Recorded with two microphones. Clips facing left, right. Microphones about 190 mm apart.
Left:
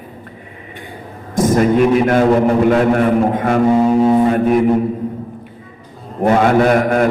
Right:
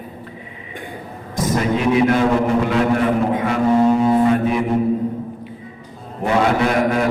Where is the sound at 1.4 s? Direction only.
50° left (ahead or behind).